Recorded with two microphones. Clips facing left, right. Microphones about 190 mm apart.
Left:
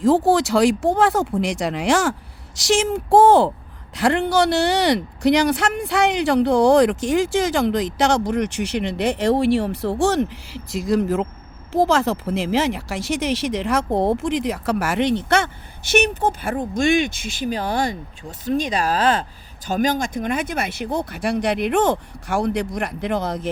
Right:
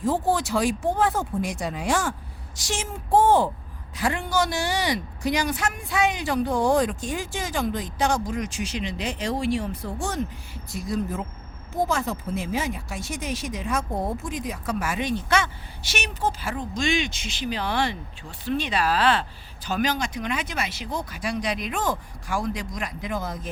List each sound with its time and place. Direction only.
0.0 s speech: 85° left
3.9 s speech: 70° left (ahead or behind)